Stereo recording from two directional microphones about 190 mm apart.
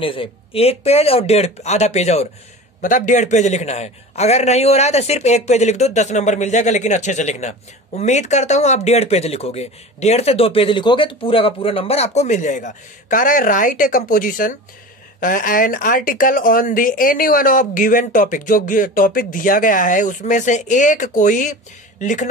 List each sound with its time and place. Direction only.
0.0 s a man's voice: 30° left (ahead or behind)